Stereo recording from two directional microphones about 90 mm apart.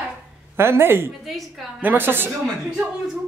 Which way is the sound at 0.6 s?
25° right (ahead or behind).